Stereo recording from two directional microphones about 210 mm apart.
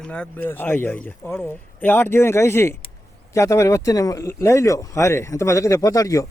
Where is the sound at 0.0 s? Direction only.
5° left (ahead or behind).